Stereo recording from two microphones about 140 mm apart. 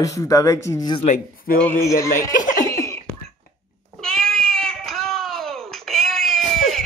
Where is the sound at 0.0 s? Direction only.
25° left (ahead or behind).